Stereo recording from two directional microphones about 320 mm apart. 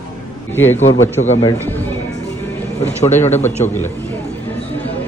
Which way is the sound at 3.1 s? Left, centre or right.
Centre.